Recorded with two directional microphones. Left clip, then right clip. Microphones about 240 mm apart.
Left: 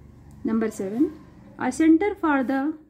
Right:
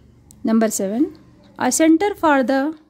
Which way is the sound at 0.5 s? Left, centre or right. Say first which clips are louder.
Right 7 dB; right.